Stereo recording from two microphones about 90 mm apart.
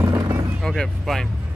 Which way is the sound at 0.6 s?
Centre (ahead or behind).